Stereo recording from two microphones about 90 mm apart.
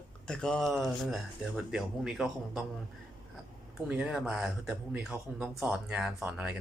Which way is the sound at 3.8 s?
15° right (ahead or behind).